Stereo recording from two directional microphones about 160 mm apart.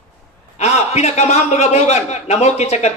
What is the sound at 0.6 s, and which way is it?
A man's voice, 45° left (ahead or behind).